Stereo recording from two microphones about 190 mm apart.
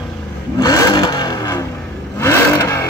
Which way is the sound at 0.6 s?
20° left (ahead or behind).